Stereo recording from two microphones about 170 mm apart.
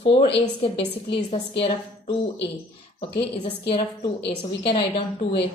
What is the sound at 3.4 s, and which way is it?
A woman's voice, 35° left (ahead or behind).